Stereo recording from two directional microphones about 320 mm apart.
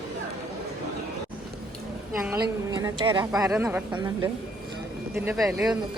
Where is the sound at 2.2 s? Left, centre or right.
Centre.